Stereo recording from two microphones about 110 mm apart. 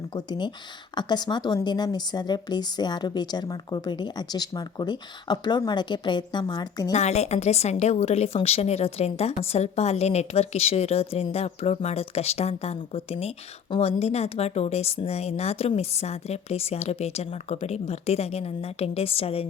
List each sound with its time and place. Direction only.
0.1 s a woman's voice: 40° left (ahead or behind)
6.9 s a woman's voice: 85° left; by 19.5 s 65° left (ahead or behind)